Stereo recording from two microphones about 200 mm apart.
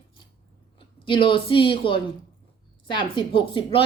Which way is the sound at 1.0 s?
25° left (ahead or behind).